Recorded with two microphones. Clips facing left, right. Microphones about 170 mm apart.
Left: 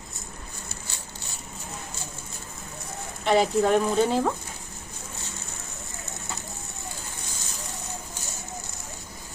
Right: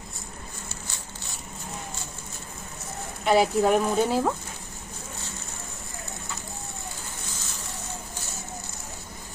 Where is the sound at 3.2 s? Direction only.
5° right (ahead or behind).